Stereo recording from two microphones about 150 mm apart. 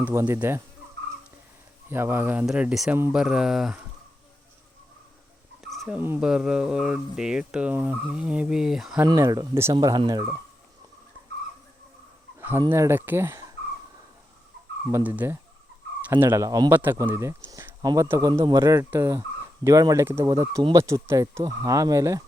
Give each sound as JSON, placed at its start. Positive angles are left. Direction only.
{"t": 0.0, "sound": "speech", "side_deg": -15}
{"t": 1.9, "sound": "speech", "side_deg": -15}
{"t": 2.5, "sound": "fowl", "side_deg": -5}
{"t": 5.9, "sound": "speech", "side_deg": -10}
{"t": 6.2, "sound": "fowl", "side_deg": -5}
{"t": 9.0, "sound": "speech", "side_deg": -20}
{"t": 12.4, "sound": "fowl", "side_deg": -15}
{"t": 12.7, "sound": "speech", "side_deg": -15}
{"t": 14.8, "sound": "speech", "side_deg": -10}